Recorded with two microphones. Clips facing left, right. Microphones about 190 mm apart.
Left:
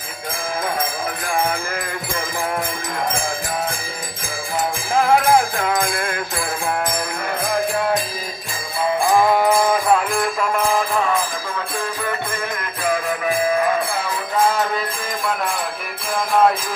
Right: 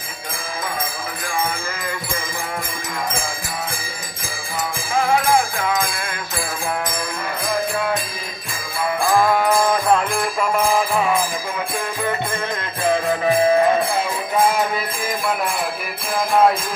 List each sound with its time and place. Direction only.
5.1 s music: 45° left (ahead or behind)
9.0 s music: 15° left (ahead or behind)
10.1 s music: 5° right (ahead or behind)
12.9 s music: 25° right (ahead or behind)